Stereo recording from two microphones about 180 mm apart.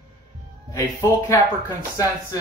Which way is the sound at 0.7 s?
15° left (ahead or behind).